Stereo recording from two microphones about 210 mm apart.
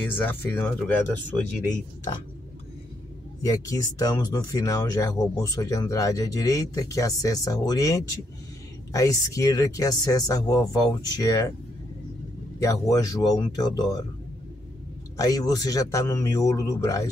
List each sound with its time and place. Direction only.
0.1 s speech: 10° left (ahead or behind)
3.4 s speech: 15° left (ahead or behind)
12.5 s speech: 15° left (ahead or behind)
15.1 s speech: 15° left (ahead or behind)